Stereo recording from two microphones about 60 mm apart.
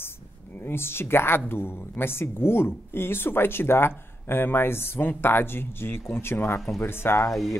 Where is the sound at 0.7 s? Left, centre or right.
Left.